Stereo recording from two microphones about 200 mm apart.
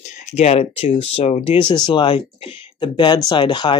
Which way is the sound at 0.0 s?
30° left (ahead or behind).